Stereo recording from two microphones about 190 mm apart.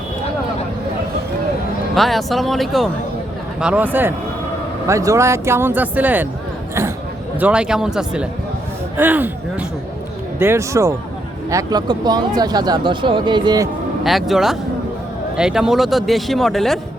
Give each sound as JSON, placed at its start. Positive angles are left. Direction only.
{"t": 2.0, "sound": "speech", "side_deg": 0}
{"t": 7.3, "sound": "speech", "side_deg": -5}
{"t": 14.0, "sound": "speech", "side_deg": 0}